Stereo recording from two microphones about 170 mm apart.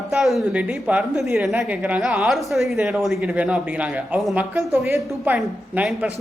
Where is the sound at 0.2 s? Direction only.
Centre (ahead or behind).